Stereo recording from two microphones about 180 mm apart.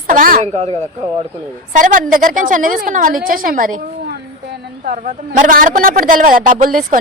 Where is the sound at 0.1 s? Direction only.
50° right (ahead or behind).